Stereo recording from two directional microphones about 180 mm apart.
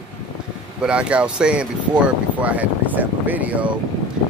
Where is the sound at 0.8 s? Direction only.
5° right (ahead or behind).